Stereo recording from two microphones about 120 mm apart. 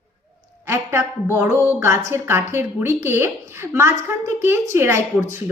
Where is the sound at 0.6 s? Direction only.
20° right (ahead or behind).